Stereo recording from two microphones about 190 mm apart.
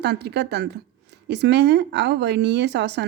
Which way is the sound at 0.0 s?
60° right (ahead or behind).